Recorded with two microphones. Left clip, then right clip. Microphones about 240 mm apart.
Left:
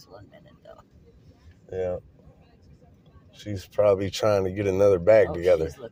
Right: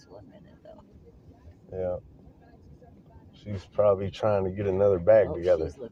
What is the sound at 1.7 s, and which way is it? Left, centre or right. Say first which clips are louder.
Speech: left 2 dB; left.